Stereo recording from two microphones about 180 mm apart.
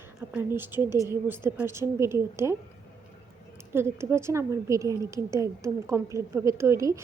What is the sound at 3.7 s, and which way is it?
A woman's voice, 15° right (ahead or behind).